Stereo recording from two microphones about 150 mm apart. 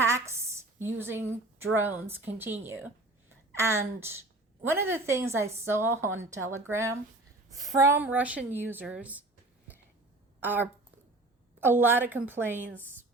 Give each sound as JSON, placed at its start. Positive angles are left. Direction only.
{"t": 0.0, "sound": "a woman's voice", "side_deg": -20}
{"t": 10.4, "sound": "a woman's voice", "side_deg": -15}